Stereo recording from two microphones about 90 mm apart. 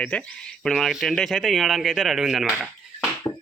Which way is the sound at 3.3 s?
50° left (ahead or behind).